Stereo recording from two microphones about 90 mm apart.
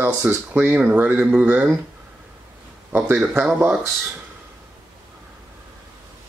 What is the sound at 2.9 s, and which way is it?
Speech, 20° right (ahead or behind).